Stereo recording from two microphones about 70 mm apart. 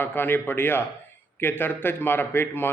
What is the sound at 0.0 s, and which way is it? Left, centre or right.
Speech, left.